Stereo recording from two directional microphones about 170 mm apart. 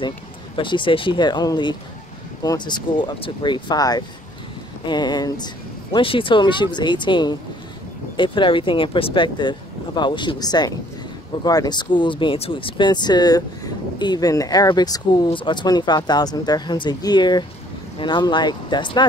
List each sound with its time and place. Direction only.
0.6 s speech: 30° left (ahead or behind)